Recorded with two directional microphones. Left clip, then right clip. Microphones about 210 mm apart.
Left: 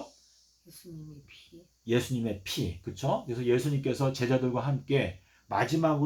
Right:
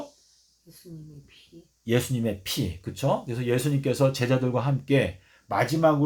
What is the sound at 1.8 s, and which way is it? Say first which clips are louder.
Speech: right 4 dB; 40° right (ahead or behind).